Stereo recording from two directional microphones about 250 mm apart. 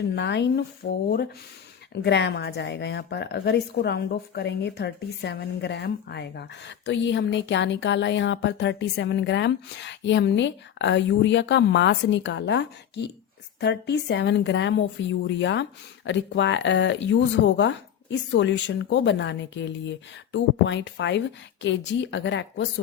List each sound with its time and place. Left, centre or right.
0.2 s a woman's voice: left